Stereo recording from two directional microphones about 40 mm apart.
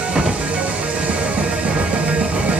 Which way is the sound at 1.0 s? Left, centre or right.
Right.